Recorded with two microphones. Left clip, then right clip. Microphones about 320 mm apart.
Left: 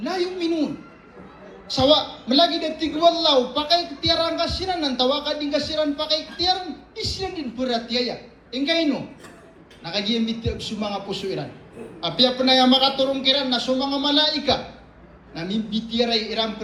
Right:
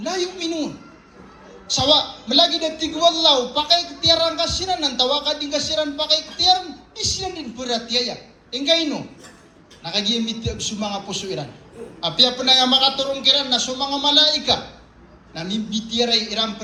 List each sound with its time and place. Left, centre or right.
0.0 s a man's voice: centre
1.7 s a man's voice: centre
10.6 s a man's voice: centre